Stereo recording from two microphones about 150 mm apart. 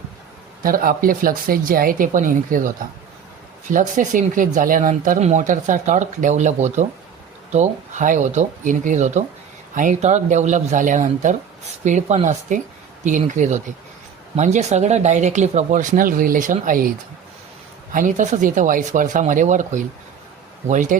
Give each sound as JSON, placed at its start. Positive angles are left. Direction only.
{"t": 0.6, "sound": "speech", "side_deg": -75}
{"t": 17.9, "sound": "speech", "side_deg": -55}